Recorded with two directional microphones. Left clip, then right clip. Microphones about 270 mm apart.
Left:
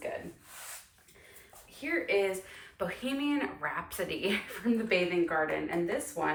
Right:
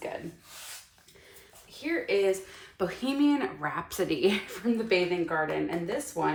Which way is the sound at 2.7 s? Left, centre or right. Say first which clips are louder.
Right 5 dB; centre.